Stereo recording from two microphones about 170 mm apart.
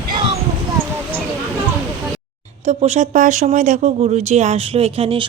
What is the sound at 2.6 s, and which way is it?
Speech, 40° right (ahead or behind).